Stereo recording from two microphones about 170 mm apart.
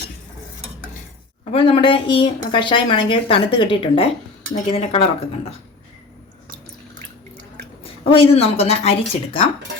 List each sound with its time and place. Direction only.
1.5 s speech: 30° left (ahead or behind)
7.9 s speech: 35° left (ahead or behind)